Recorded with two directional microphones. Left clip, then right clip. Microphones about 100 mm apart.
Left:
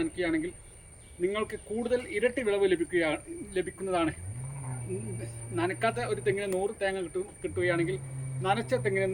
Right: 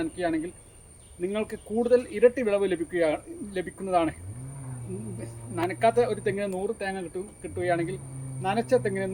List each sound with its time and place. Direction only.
0.0 s speech: 45° right (ahead or behind)
5.2 s speech: 40° right (ahead or behind)
8.9 s speech: 35° right (ahead or behind)